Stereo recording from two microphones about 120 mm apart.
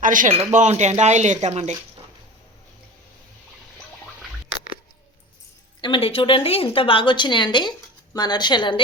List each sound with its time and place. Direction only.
0.0 s speech: 90° right; by 1.7 s 70° right (ahead or behind)
5.8 s speech: 50° left (ahead or behind)